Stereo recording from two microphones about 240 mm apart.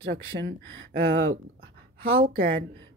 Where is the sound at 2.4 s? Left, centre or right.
Right.